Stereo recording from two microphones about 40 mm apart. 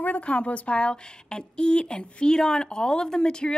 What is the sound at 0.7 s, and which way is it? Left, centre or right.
A woman's voice, left.